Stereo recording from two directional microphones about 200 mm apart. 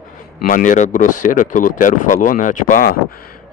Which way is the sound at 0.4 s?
40° left (ahead or behind).